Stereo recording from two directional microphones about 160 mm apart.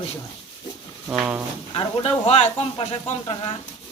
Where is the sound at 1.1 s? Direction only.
5° right (ahead or behind).